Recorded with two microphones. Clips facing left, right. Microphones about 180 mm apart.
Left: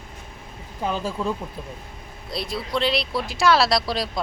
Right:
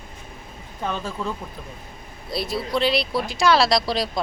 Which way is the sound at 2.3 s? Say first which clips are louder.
Right 3 dB; 5° right (ahead or behind).